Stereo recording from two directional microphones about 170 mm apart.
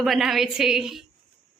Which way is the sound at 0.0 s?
Centre (ahead or behind).